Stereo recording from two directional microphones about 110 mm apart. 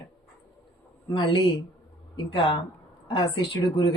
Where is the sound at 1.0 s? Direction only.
45° left (ahead or behind).